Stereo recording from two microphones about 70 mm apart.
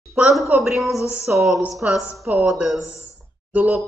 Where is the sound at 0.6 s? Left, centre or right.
Centre.